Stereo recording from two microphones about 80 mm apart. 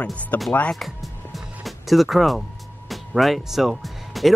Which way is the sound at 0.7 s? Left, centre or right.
Centre.